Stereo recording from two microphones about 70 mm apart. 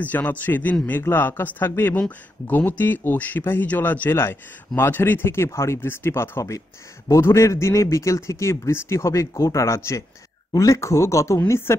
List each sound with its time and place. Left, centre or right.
0.0 s a man's voice: left